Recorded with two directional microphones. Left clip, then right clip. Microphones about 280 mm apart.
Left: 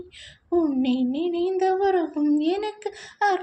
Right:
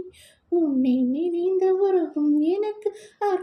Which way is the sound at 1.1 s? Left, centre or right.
Left.